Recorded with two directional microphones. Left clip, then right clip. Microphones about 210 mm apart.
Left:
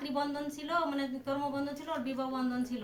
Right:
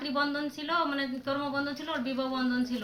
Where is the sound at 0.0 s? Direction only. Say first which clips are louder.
Right 4 dB; 10° left (ahead or behind).